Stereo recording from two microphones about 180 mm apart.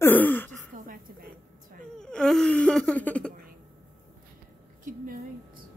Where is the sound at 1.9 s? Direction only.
5° left (ahead or behind).